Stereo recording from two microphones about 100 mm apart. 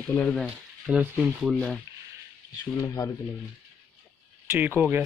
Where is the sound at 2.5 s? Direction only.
40° left (ahead or behind).